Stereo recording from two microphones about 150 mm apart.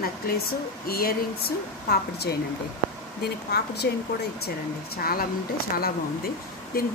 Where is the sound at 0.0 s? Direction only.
85° left.